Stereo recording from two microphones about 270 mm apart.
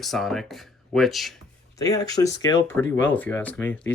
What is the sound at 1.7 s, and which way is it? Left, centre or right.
Speech, centre.